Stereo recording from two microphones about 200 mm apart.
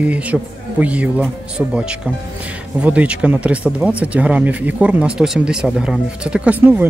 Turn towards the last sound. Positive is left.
turn(degrees=-10)  # may be behind; listen again after turning